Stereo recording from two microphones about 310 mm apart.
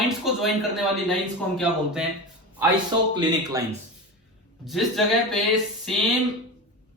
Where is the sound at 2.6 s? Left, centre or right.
Centre.